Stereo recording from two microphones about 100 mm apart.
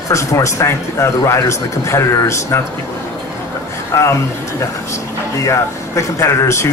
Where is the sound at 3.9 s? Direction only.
30° left (ahead or behind).